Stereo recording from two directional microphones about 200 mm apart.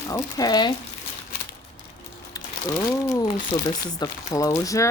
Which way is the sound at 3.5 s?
20° left (ahead or behind).